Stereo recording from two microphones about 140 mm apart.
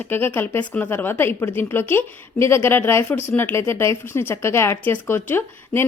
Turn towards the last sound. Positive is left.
turn(degrees=15)  # may be behind; listen again after turning